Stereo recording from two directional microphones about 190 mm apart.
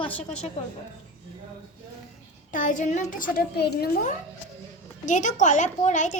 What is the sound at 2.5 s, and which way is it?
Speech, 45° left (ahead or behind).